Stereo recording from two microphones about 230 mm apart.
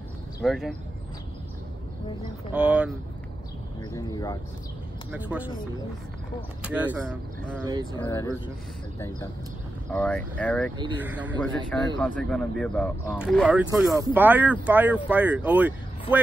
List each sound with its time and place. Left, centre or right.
0.4 s speech: centre
2.5 s speech: centre
3.9 s speech: centre
5.1 s speech: centre
6.6 s speech: centre
7.6 s speech: centre
8.0 s speech: centre
9.8 s speech: centre
11.0 s speech: centre
11.3 s speech: centre